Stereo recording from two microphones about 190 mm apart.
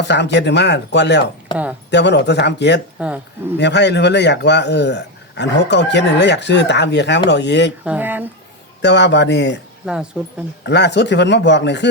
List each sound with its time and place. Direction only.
0.0 s speech: 65° left (ahead or behind)
3.0 s speech: 5° right (ahead or behind)
3.6 s speech: 65° left (ahead or behind)
7.9 s speech: 10° right (ahead or behind)
8.8 s speech: 65° left (ahead or behind)
9.8 s speech: 5° right (ahead or behind)
10.7 s speech: 65° left (ahead or behind)